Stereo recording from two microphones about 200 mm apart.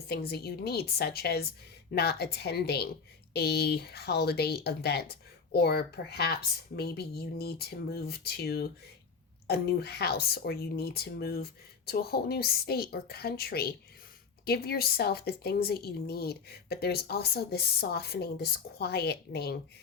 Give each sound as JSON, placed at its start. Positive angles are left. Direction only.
{"t": 0.1, "sound": "speech", "side_deg": 55}